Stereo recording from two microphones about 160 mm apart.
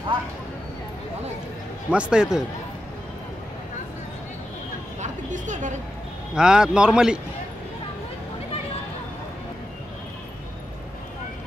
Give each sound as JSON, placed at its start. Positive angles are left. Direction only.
{"t": 1.9, "sound": "a man's voice", "side_deg": -5}
{"t": 5.0, "sound": "a sound", "side_deg": -50}
{"t": 6.3, "sound": "a man's voice", "side_deg": -5}